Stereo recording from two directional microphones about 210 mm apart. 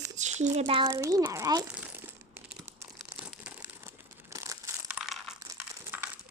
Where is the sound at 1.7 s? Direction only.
5° right (ahead or behind).